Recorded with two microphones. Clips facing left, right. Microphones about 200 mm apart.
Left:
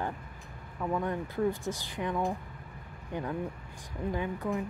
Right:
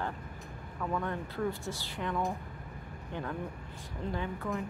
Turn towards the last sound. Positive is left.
turn(degrees=15)  # may be behind; listen again after turning